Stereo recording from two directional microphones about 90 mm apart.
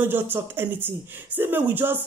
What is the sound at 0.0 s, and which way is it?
Speech, 20° right (ahead or behind).